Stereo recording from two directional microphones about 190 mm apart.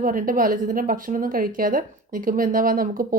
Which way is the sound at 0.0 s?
45° right (ahead or behind).